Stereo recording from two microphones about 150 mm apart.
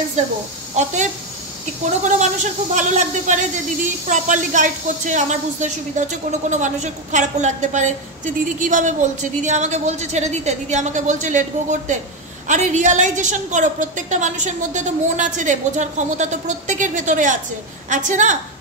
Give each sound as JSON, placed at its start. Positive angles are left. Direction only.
{"t": 0.2, "sound": "a woman's voice", "side_deg": -50}